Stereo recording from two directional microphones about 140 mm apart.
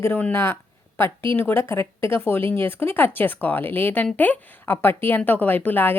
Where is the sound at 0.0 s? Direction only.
15° left (ahead or behind).